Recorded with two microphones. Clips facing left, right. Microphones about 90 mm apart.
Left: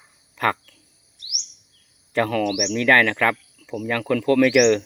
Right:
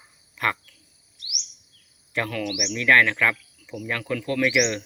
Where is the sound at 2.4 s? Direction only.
45° left (ahead or behind).